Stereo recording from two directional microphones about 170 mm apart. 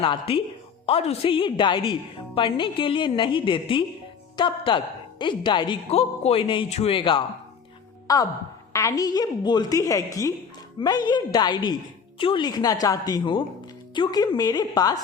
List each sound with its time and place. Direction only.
0.0 s a woman's voice: 30° left (ahead or behind)